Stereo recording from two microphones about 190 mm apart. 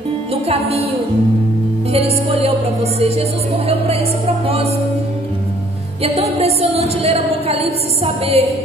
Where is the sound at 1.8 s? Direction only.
30° right (ahead or behind).